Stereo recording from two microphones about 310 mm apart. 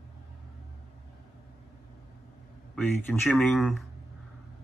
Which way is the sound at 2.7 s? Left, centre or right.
Centre.